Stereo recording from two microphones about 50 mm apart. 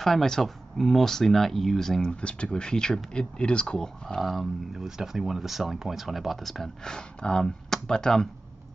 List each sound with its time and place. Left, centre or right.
0.0 s speech: centre
4.2 s speech: centre
6.8 s speech: centre